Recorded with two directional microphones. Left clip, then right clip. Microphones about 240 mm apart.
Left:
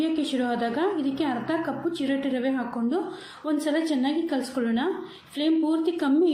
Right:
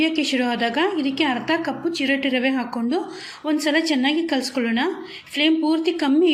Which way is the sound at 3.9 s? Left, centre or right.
Right.